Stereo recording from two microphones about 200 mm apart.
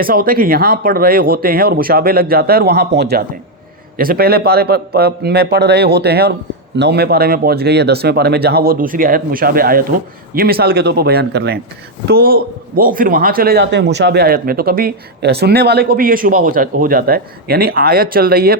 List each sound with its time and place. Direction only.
0.0 s a man's voice: 45° right (ahead or behind)